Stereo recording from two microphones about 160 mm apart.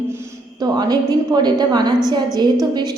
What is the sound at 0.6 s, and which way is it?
A woman's voice, 25° right (ahead or behind).